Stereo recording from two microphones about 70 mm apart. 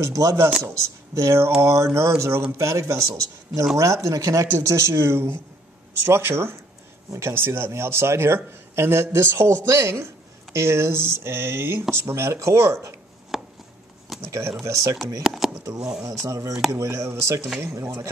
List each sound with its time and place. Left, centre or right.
0.0 s a man's voice: right
13.3 s chopping: centre
14.2 s a man's voice: right
15.2 s speech: centre
16.0 s a man's voice: right